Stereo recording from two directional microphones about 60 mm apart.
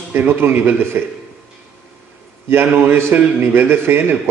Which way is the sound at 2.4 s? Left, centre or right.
Right.